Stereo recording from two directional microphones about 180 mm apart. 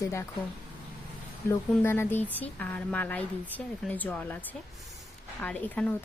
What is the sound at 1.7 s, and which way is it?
A woman's voice, 15° left (ahead or behind).